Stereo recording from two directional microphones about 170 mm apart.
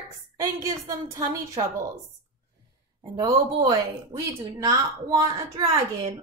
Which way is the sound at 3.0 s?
20° right (ahead or behind).